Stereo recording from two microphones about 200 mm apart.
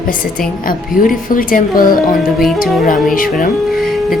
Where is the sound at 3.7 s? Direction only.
Centre (ahead or behind).